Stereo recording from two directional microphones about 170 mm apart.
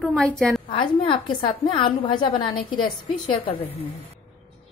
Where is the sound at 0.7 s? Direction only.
30° left (ahead or behind).